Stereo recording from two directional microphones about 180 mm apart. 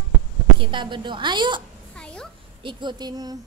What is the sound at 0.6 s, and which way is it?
A child's voice, 25° right (ahead or behind).